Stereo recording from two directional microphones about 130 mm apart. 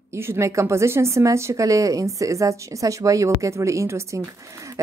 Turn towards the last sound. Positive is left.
turn(degrees=-25)  # may be behind; listen again after turning